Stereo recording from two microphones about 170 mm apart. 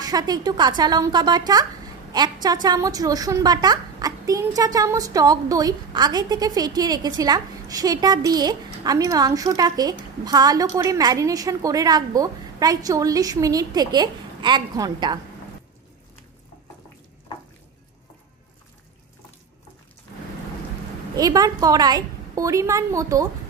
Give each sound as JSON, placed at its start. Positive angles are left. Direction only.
{"t": 0.0, "sound": "speech", "side_deg": -25}
{"t": 21.2, "sound": "speech", "side_deg": -20}